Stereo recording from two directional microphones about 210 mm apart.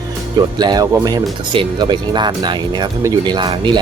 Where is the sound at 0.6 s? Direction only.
20° right (ahead or behind).